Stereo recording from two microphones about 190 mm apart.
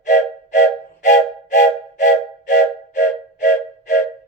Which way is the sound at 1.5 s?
45° left (ahead or behind).